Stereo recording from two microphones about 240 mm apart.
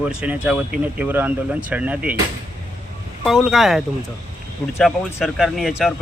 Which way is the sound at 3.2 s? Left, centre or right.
Centre.